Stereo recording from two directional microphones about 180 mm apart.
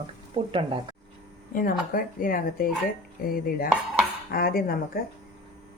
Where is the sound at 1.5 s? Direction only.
50° left (ahead or behind).